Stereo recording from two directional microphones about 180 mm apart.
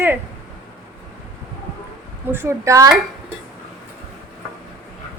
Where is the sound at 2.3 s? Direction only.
15° right (ahead or behind).